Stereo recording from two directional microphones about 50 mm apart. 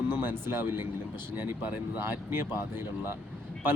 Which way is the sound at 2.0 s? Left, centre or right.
Right.